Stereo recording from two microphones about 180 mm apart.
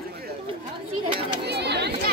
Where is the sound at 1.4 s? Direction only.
65° right (ahead or behind).